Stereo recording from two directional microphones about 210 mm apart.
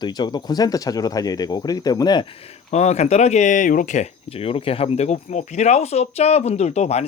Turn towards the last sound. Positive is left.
turn(degrees=30)  # may be behind; listen again after turning